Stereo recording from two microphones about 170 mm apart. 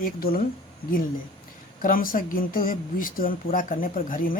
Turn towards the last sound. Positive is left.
turn(degrees=55)  # may be behind; listen again after turning